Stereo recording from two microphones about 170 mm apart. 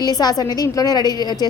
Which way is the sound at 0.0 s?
25° left (ahead or behind).